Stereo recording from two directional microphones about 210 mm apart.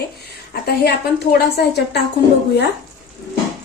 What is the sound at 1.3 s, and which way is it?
Speech, 50° left (ahead or behind).